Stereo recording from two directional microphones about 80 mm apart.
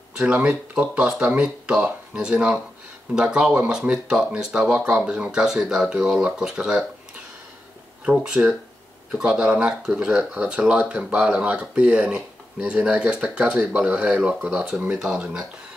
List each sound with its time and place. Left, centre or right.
0.2 s speech: centre
1.0 s speech: centre
8.0 s speech: centre